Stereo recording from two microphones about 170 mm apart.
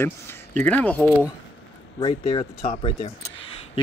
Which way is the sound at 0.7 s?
10° left (ahead or behind).